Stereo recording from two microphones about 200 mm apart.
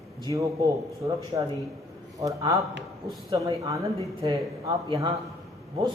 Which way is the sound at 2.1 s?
15° right (ahead or behind).